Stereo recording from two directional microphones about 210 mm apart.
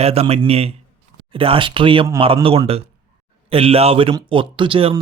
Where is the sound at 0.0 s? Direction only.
30° right (ahead or behind).